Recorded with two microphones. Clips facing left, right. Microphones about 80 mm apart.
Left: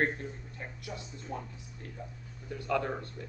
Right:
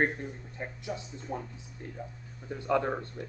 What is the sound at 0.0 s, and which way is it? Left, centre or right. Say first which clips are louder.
Speech: right 2 dB; centre.